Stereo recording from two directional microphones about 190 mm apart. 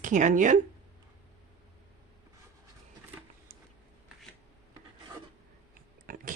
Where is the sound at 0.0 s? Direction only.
40° right (ahead or behind).